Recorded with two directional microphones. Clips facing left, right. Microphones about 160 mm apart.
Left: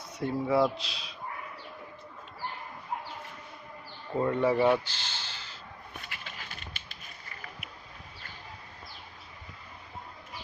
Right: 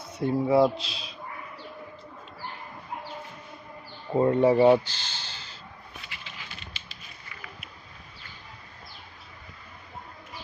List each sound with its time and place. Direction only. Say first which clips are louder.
0.1 s speech: right 5 dB; 25° right (ahead or behind)
4.1 s speech: right 6 dB; 30° right (ahead or behind)
6.0 s patter: even; 50° left (ahead or behind)